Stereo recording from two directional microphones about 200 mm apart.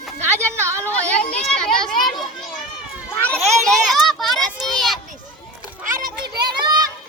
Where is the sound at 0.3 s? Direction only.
15° right (ahead or behind).